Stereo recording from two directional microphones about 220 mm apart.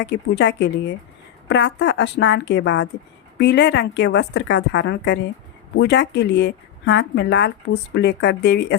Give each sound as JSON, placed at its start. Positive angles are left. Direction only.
{"t": 0.0, "sound": "a woman's voice", "side_deg": 50}